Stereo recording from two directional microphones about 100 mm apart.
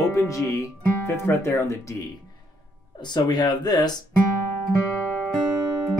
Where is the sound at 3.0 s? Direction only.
45° left (ahead or behind).